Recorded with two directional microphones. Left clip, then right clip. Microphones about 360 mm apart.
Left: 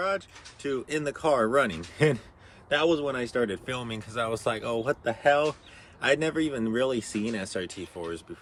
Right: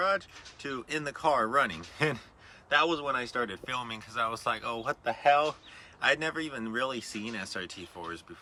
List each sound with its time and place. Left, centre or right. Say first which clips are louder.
0.6 s a man's voice: left 5 dB; centre